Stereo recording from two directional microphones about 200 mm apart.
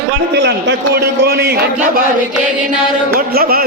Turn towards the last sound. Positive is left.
turn(degrees=-50)  # may be behind; listen again after turning